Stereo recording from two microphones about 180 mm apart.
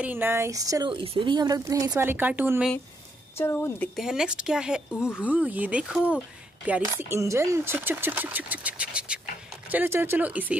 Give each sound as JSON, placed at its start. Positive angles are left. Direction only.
{"t": 0.0, "sound": "speech", "side_deg": -10}
{"t": 3.3, "sound": "a woman's voice", "side_deg": 15}
{"t": 3.9, "sound": "speech", "side_deg": 0}